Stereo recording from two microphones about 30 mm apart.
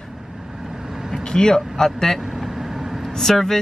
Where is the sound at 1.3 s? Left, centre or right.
Left.